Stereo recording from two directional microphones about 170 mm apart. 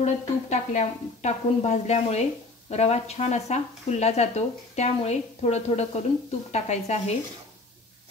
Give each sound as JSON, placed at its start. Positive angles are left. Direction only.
{"t": 0.0, "sound": "speech", "side_deg": 40}